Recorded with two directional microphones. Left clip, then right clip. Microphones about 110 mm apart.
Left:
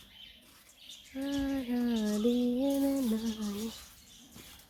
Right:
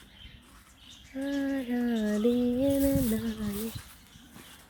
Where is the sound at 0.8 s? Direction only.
Centre (ahead or behind).